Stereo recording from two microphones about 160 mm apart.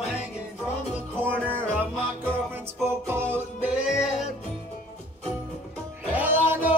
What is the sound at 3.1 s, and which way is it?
Music, 15° right (ahead or behind).